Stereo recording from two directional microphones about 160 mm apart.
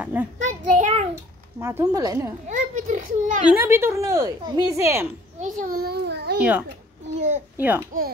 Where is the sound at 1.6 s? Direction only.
15° right (ahead or behind).